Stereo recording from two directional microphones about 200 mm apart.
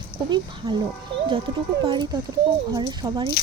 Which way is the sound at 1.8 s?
20° right (ahead or behind).